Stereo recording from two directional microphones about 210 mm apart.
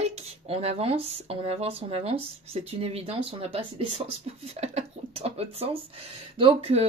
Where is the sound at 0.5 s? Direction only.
30° right (ahead or behind).